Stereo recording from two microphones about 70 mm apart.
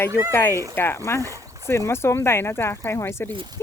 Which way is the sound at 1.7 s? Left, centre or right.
Left.